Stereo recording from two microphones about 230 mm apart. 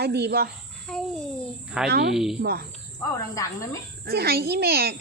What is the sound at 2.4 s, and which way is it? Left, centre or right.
Speech, right.